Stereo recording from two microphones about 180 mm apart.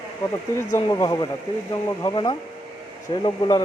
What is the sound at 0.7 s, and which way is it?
Speech, 20° left (ahead or behind).